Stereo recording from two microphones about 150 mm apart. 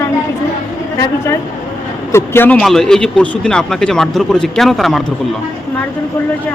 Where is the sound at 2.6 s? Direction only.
5° left (ahead or behind).